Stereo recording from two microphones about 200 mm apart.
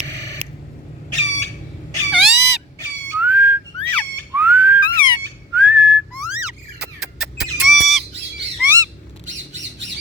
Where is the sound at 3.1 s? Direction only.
10° right (ahead or behind).